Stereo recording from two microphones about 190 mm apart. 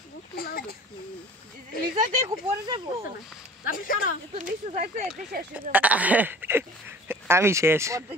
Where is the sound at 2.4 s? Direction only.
20° right (ahead or behind).